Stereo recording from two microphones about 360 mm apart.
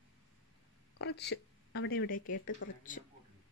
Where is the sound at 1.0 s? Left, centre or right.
Left.